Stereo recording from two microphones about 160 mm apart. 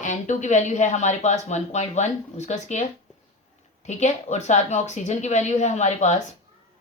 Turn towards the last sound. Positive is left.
turn(degrees=45)  # may be behind; listen again after turning